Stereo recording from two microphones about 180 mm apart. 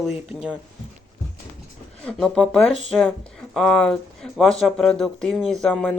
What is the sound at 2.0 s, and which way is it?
Speech, centre (ahead or behind).